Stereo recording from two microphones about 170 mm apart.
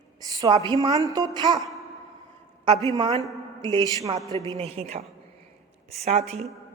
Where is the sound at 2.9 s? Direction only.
25° right (ahead or behind).